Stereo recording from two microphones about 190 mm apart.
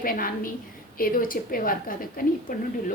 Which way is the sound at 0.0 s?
50° left (ahead or behind).